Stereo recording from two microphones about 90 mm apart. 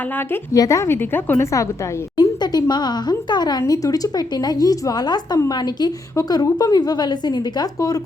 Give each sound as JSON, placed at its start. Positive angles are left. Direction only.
{"t": 0.5, "sound": "a woman's voice", "side_deg": 40}
{"t": 2.1, "sound": "speech", "side_deg": 50}
{"t": 3.6, "sound": "a woman's voice", "side_deg": 40}